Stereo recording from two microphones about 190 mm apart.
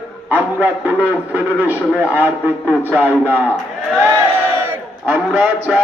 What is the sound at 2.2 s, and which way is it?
Speech, 10° left (ahead or behind).